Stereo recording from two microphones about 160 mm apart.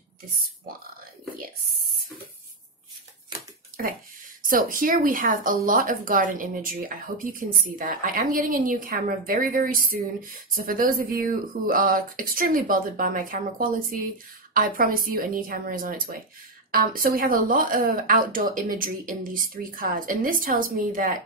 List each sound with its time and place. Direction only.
4.5 s speech: 60° right (ahead or behind)